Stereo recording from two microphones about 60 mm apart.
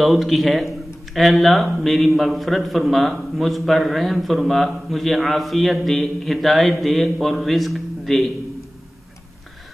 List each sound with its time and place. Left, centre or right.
0.0 s a man's voice: centre